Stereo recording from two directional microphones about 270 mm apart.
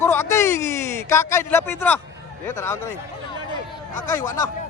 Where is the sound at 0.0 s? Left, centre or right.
Centre.